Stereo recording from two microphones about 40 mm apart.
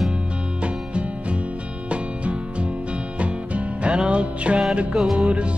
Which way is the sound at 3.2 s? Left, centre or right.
Right.